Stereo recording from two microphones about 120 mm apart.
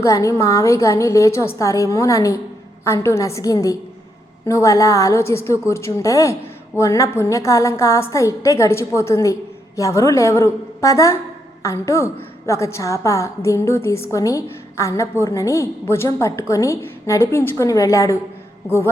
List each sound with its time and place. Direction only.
0.0 s a woman's voice: 25° left (ahead or behind)